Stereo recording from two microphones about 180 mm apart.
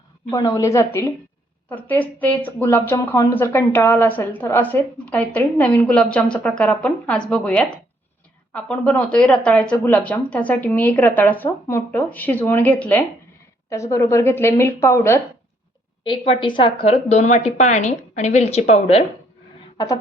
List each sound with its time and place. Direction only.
0.3 s speech: 20° left (ahead or behind)
16.0 s a woman's voice: 30° left (ahead or behind)
19.7 s speech: 20° left (ahead or behind)